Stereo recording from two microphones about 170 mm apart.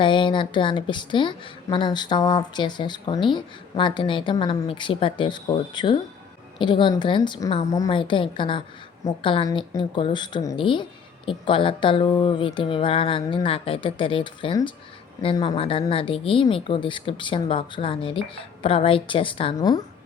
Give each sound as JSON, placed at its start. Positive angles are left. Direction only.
{"t": 0.0, "sound": "a woman's voice", "side_deg": 30}